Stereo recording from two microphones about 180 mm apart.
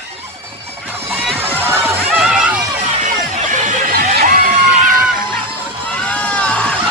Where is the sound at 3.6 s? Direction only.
50° right (ahead or behind).